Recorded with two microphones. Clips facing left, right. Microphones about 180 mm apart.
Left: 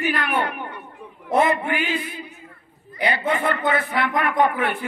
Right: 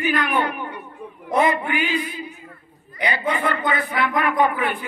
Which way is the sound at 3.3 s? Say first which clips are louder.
Even; 60° left (ahead or behind).